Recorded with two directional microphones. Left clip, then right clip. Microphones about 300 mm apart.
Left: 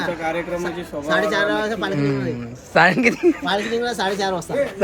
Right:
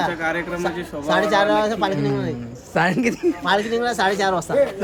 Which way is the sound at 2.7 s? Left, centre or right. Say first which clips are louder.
Left 5 dB; centre.